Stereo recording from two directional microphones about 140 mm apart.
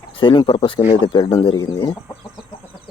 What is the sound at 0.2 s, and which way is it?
Speech, 35° left (ahead or behind).